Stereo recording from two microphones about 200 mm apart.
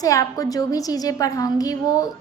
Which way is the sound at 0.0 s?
15° left (ahead or behind).